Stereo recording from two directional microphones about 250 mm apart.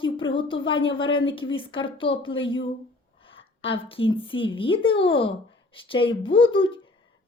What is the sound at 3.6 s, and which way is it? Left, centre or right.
A woman's voice, left.